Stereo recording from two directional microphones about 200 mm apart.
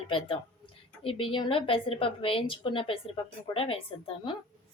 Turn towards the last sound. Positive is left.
turn(degrees=25)  # may be behind; listen again after turning